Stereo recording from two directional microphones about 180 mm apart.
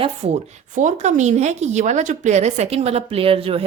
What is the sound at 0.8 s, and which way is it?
A woman's voice, 40° right (ahead or behind).